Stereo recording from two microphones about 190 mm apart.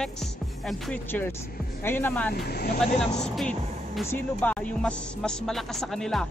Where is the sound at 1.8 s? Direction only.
10° left (ahead or behind).